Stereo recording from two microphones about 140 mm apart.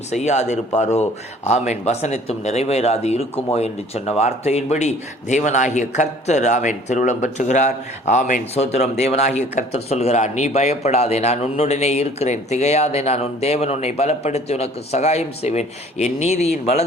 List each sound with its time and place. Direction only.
0.1 s speech: 55° left (ahead or behind)